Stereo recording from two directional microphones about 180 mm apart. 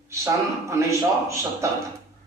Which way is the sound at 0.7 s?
15° right (ahead or behind).